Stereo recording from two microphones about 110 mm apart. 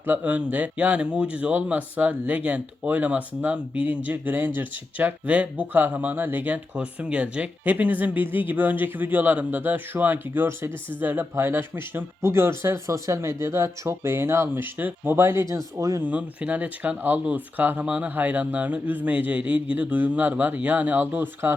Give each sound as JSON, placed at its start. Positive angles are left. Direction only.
{"t": 0.0, "sound": "speech", "side_deg": -15}
{"t": 16.0, "sound": "speech", "side_deg": -15}